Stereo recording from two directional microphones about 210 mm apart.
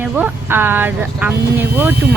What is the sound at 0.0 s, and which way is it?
Speech, 10° right (ahead or behind).